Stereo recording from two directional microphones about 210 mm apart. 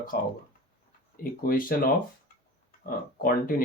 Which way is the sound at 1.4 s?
45° left (ahead or behind).